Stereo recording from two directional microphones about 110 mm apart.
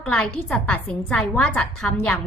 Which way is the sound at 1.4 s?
15° left (ahead or behind).